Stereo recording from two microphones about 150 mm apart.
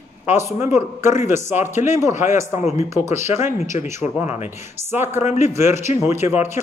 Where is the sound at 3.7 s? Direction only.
50° left (ahead or behind).